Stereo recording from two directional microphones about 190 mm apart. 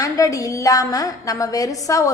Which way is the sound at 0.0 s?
15° left (ahead or behind).